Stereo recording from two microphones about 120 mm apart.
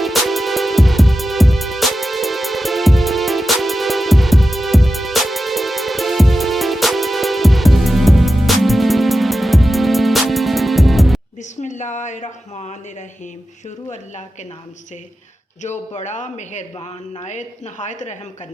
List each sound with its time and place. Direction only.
0.0 s music: centre (ahead or behind)
11.6 s a sound: 85° left
15.6 s a man's voice: 75° left (ahead or behind)